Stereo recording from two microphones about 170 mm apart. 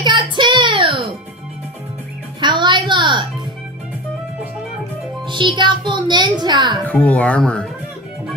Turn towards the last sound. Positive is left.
turn(degrees=5)  # may be behind; listen again after turning